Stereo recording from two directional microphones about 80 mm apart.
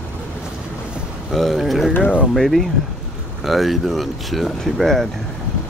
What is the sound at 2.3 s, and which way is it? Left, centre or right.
Speech, centre.